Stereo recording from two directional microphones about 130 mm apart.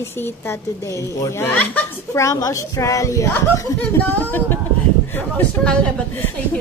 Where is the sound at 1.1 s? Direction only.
20° left (ahead or behind).